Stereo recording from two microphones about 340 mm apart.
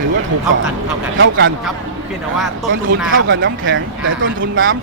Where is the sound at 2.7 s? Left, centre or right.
Right.